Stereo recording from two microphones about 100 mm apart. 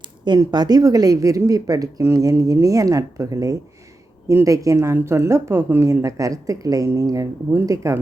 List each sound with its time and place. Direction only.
0.3 s speech: 45° right (ahead or behind)